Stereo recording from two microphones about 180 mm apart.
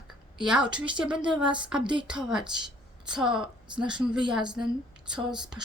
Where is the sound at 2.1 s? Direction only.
5° right (ahead or behind).